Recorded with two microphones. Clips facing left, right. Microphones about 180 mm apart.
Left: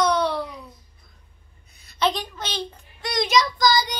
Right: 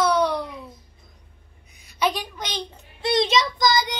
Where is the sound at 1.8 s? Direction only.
10° right (ahead or behind).